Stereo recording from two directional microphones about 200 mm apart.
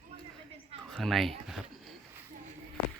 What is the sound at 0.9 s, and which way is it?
Speech, centre (ahead or behind).